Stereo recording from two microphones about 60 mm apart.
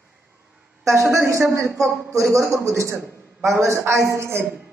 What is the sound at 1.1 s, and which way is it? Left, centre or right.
Speech, right.